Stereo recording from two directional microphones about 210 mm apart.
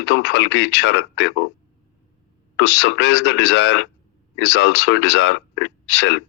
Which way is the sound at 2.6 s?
55° left (ahead or behind).